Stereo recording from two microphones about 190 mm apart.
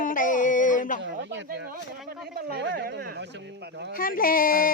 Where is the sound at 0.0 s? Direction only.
45° left (ahead or behind).